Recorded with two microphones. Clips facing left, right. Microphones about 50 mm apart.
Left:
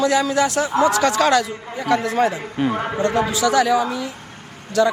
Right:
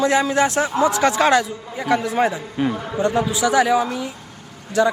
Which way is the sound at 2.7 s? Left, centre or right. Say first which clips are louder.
Left 1 dB; left.